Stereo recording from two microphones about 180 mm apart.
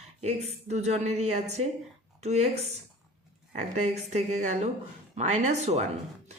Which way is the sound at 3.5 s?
40° right (ahead or behind).